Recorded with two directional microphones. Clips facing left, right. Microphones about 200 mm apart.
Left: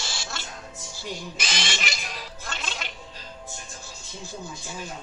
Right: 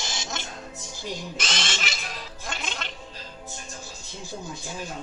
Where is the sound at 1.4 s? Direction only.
Centre (ahead or behind).